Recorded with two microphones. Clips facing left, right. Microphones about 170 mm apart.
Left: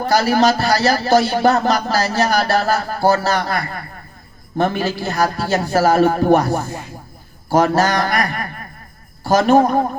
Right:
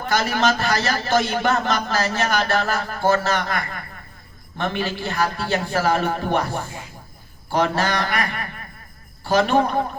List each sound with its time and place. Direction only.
0.0 s a man's voice: 35° left (ahead or behind)